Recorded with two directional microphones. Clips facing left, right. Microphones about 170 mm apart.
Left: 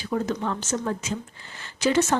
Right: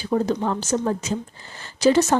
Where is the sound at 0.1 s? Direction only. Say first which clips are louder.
Right 5 dB; 35° right (ahead or behind).